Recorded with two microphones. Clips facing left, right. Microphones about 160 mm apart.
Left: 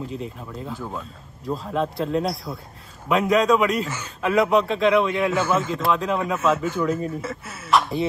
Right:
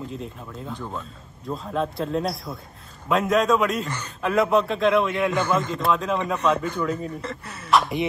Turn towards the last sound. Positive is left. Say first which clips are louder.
# even
turn(degrees=0)  # may be behind; listen again after turning